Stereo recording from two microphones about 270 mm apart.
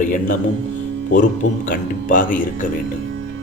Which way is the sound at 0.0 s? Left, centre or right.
Left.